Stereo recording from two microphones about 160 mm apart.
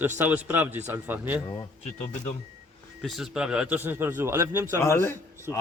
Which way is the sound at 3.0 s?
Centre (ahead or behind).